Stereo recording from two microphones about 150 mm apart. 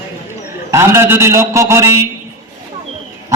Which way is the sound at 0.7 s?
20° right (ahead or behind).